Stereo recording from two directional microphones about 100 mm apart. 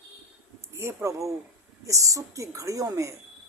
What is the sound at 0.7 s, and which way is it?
Speech, 30° right (ahead or behind).